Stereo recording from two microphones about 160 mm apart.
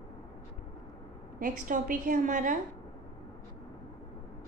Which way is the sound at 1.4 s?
60° right (ahead or behind).